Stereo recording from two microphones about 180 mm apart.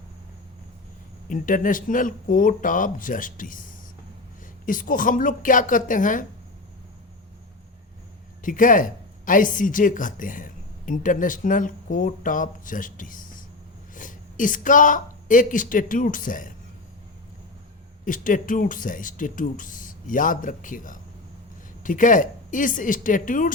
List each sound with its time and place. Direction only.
1.3 s speech: 50° left (ahead or behind)
4.6 s speech: 50° left (ahead or behind)
8.4 s speech: 45° left (ahead or behind)
18.0 s speech: 45° left (ahead or behind)